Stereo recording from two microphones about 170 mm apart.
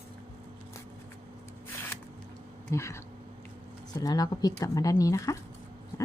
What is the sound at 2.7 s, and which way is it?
Speech, 15° left (ahead or behind).